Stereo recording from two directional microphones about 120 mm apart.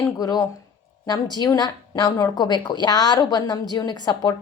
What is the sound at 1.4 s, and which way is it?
A woman's voice, 35° left (ahead or behind).